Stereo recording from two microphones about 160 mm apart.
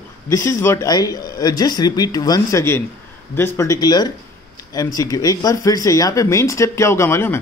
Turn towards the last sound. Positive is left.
turn(degrees=15)  # may be behind; listen again after turning